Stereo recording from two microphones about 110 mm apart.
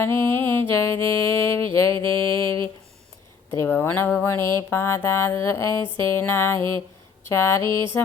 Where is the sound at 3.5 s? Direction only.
20° left (ahead or behind).